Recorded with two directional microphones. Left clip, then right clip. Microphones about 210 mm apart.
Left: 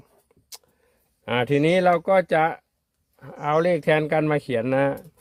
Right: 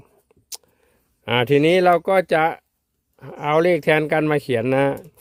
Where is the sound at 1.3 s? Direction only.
40° right (ahead or behind).